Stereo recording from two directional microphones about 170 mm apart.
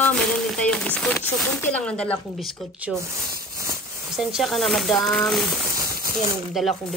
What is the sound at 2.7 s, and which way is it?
Speech, 10° right (ahead or behind).